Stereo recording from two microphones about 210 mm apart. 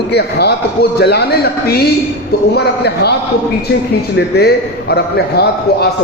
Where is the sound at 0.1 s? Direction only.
50° left (ahead or behind).